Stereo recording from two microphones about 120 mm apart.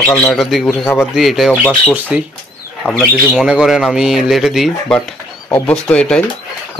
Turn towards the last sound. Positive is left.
turn(degrees=10)  # may be behind; listen again after turning